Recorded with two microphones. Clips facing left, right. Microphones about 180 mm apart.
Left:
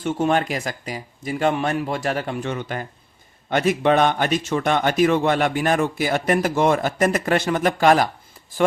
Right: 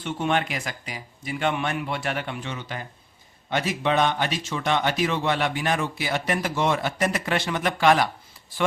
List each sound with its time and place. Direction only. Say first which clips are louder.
0.0 s speech: left 5 dB; 45° left (ahead or behind)